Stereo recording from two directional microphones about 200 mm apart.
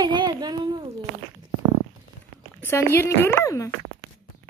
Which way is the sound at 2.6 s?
10° left (ahead or behind).